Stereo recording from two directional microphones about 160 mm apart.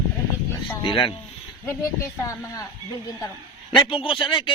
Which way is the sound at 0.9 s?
30° left (ahead or behind).